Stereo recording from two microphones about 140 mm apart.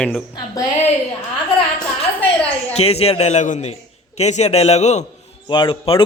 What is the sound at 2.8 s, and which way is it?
A man's voice, 45° left (ahead or behind).